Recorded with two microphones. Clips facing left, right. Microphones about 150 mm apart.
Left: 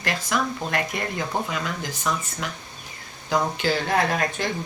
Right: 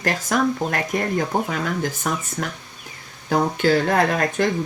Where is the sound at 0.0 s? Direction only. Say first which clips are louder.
Right 5 dB; 45° right (ahead or behind).